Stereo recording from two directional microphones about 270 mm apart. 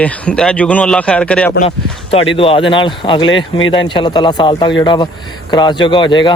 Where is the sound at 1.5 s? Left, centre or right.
Left.